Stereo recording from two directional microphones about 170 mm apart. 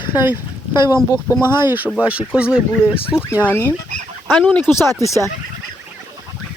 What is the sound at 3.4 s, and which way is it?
Speech, 10° left (ahead or behind).